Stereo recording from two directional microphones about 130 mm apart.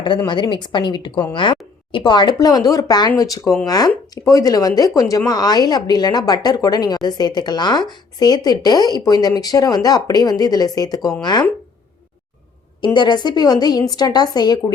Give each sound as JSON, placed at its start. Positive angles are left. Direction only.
{"t": 0.3, "sound": "speech", "side_deg": 35}
{"t": 12.8, "sound": "speech", "side_deg": 35}